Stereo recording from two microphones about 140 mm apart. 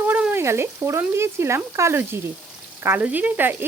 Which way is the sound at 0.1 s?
15° right (ahead or behind).